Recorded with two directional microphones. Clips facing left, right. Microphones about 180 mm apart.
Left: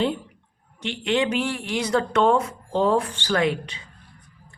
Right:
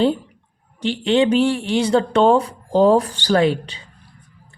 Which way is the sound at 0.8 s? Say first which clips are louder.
Right 6 dB; 30° right (ahead or behind).